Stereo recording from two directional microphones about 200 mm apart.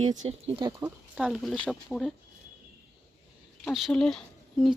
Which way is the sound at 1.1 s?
Centre (ahead or behind).